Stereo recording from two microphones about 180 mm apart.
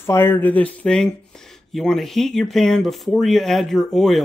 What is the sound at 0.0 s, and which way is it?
Speech, 15° left (ahead or behind).